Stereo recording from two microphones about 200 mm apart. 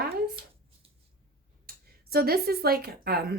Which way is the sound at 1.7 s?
50° right (ahead or behind).